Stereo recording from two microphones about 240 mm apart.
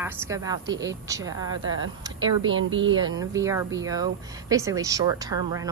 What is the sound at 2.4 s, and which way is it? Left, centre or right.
Speech, right.